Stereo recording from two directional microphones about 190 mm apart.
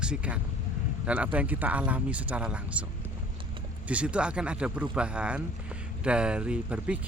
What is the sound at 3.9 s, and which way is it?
Speech, 5° right (ahead or behind).